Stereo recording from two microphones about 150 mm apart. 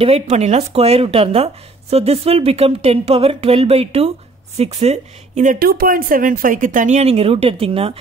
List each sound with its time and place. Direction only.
0.0 s speech: 45° right (ahead or behind)